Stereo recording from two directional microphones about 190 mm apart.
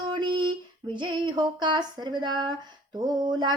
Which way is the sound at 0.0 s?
25° right (ahead or behind).